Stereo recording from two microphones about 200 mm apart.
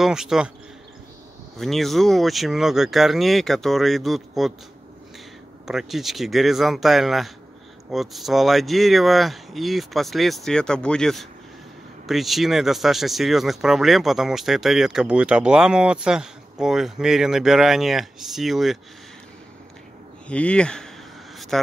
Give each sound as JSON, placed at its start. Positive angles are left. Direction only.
{"t": 0.0, "sound": "speech", "side_deg": 0}
{"t": 1.6, "sound": "speech", "side_deg": 0}
{"t": 5.7, "sound": "speech", "side_deg": 0}
{"t": 20.2, "sound": "speech", "side_deg": 5}